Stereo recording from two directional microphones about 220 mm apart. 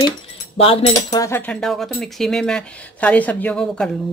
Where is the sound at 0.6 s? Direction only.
25° left (ahead or behind).